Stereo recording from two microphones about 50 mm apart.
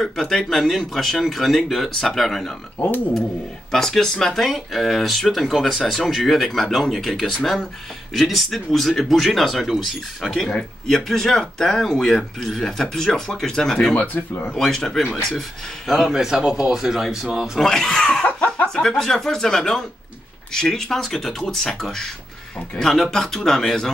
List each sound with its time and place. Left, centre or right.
0.0 s speech: centre
3.7 s speech: centre
10.9 s speech: centre
14.1 s speech: left
14.6 s speech: centre
15.9 s speech: centre
17.6 s speech: centre